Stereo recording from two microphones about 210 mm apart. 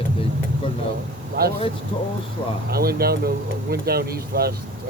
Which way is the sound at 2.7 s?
45° right (ahead or behind).